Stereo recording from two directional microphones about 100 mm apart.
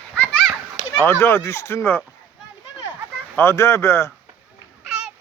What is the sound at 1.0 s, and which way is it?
Speech, 25° left (ahead or behind).